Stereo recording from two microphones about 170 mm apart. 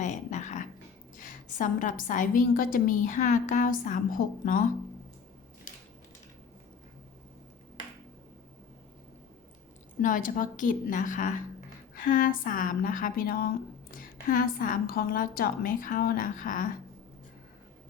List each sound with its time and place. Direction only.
0.0 s a sound: 45° left (ahead or behind)
1.2 s a woman's voice: 50° left (ahead or behind)
10.0 s a woman's voice: 50° left (ahead or behind)